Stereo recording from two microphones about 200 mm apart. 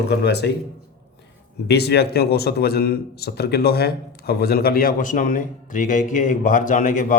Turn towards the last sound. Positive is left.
turn(degrees=40)  # may be behind; listen again after turning